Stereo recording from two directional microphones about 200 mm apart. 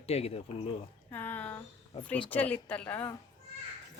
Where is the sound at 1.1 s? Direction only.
10° left (ahead or behind).